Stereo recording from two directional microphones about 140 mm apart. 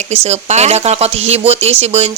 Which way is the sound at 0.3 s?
50° right (ahead or behind).